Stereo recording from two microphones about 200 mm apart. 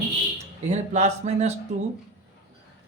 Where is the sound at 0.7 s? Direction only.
35° right (ahead or behind).